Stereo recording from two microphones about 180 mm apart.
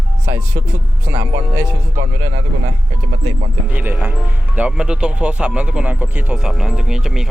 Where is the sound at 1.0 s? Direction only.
15° right (ahead or behind).